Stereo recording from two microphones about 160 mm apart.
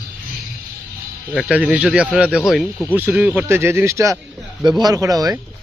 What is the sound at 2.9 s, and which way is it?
A man's voice, 10° right (ahead or behind).